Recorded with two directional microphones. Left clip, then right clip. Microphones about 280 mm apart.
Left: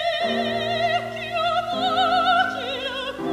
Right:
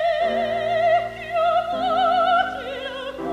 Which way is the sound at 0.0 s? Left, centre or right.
Right.